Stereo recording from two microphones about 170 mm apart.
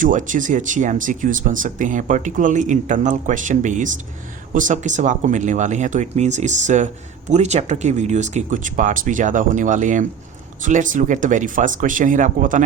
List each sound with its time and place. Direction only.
0.0 s speech: 50° right (ahead or behind)